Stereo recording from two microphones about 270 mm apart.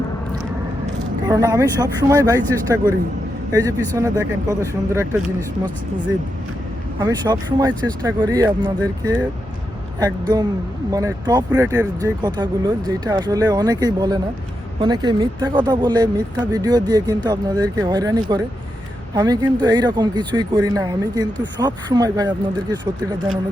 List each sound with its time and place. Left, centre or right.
1.3 s speech: centre
7.0 s speech: centre
10.0 s speech: centre